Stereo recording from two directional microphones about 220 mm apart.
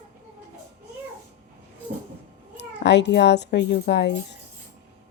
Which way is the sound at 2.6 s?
50° left (ahead or behind).